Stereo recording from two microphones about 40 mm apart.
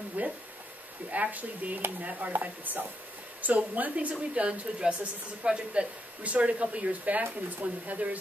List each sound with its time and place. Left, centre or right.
0.2 s a sound: right
1.1 s speech: right
2.4 s speech: right
4.4 s a woman's voice: right